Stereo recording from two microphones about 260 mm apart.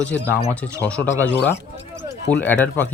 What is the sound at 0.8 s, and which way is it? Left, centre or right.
Speech, centre.